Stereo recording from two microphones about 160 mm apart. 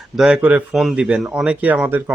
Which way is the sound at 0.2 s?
5° right (ahead or behind).